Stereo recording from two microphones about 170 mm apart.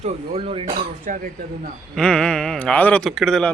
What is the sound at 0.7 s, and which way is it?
Speech, 50° right (ahead or behind).